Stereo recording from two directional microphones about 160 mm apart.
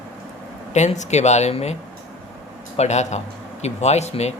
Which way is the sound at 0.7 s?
45° left (ahead or behind).